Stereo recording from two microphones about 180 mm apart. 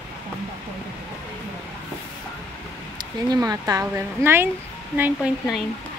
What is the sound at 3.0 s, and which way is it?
Speech, 20° right (ahead or behind).